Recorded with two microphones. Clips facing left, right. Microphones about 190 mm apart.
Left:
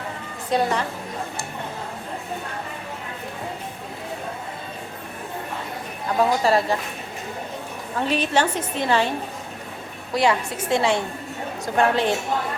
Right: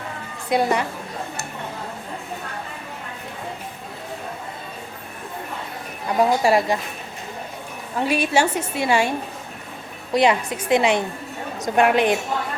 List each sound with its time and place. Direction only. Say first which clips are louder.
0.5 s a woman's voice: right 2 dB; 10° right (ahead or behind)
6.1 s a woman's voice: right 2 dB; 15° right (ahead or behind)
8.0 s a woman's voice: right 2 dB; 10° right (ahead or behind)
10.2 s a woman's voice: right 2 dB; 20° right (ahead or behind)